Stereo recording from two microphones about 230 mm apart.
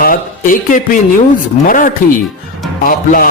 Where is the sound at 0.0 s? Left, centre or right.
Left.